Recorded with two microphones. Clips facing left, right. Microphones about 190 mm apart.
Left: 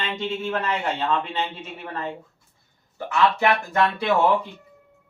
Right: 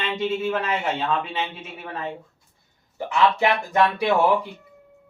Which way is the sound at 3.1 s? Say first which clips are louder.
Even; 20° right (ahead or behind).